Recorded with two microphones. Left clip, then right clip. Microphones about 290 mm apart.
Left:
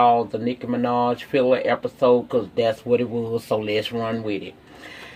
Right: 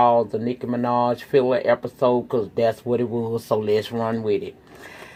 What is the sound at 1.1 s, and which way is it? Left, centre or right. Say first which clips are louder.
Speech: even; right.